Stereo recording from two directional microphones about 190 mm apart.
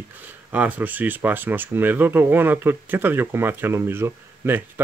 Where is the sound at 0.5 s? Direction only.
10° right (ahead or behind).